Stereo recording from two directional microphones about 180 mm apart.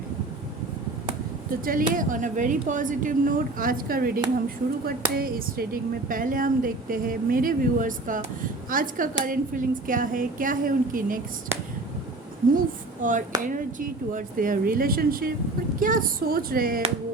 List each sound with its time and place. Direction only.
1.6 s speech: 50° right (ahead or behind)
13.0 s speech: 45° right (ahead or behind)